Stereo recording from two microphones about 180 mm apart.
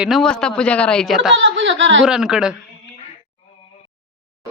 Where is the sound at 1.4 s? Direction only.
90° right.